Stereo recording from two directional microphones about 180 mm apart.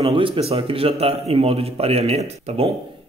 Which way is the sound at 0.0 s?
30° right (ahead or behind).